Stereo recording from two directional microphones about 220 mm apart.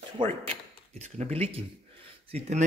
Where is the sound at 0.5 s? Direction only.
30° right (ahead or behind).